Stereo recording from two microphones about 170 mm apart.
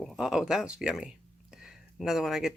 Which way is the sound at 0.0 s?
Centre (ahead or behind).